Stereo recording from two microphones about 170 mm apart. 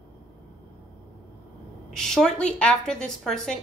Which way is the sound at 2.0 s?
5° left (ahead or behind).